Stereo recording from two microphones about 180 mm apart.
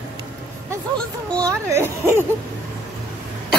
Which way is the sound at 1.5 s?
15° right (ahead or behind).